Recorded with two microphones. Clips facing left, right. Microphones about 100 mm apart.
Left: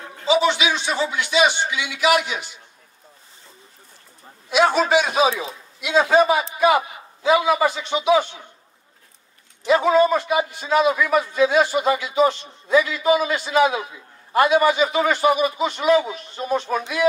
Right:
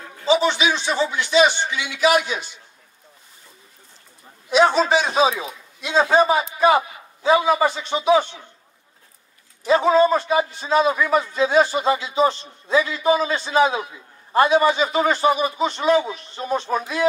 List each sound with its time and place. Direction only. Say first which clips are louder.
0.8 s a man's voice: right 1 dB; 30° right (ahead or behind)
4.5 s speech: right 1 dB; 30° right (ahead or behind)
5.3 s a man's voice: left 1 dB; 30° left (ahead or behind)
5.8 s a man's voice: even; 30° right (ahead or behind)
9.7 s a man's voice: even; 30° right (ahead or behind)